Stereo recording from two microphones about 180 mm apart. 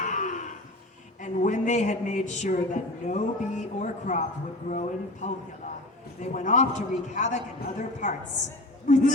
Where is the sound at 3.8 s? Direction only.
45° left (ahead or behind).